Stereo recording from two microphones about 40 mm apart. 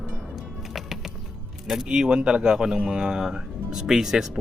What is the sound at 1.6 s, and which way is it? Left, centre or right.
Speech, centre.